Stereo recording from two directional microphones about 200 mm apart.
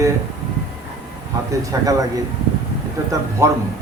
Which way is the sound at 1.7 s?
15° right (ahead or behind).